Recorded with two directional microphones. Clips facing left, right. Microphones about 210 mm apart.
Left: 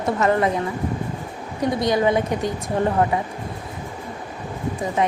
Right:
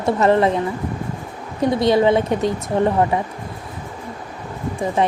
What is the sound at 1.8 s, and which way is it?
Speech, 25° right (ahead or behind).